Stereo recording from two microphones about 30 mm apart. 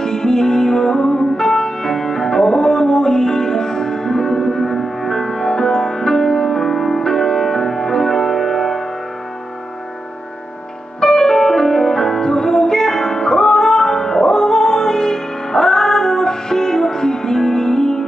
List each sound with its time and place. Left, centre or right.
0.0 s music: left
11.0 s music: left